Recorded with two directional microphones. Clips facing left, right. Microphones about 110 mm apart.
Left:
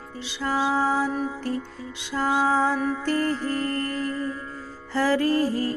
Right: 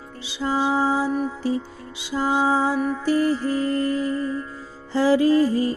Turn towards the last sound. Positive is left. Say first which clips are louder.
# right 5 dB
turn(degrees=-15)  # may be behind; listen again after turning